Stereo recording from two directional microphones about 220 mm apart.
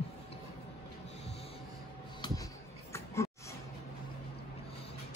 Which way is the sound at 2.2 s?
20° left (ahead or behind).